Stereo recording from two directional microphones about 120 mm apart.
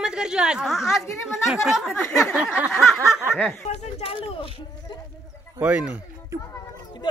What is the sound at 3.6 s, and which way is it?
Speech, 65° left (ahead or behind).